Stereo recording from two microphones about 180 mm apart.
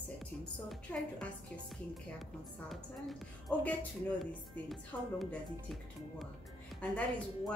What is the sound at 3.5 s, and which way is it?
A woman's voice, 5° left (ahead or behind).